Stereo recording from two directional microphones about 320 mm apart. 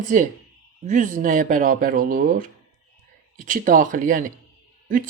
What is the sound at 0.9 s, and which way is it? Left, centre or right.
Speech, right.